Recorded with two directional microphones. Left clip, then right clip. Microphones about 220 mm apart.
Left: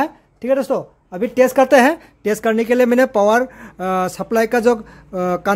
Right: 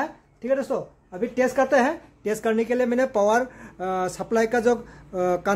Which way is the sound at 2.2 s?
30° left (ahead or behind).